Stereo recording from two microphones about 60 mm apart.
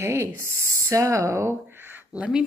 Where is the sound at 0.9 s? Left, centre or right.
Right.